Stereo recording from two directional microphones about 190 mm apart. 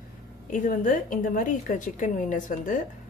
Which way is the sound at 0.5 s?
45° left (ahead or behind).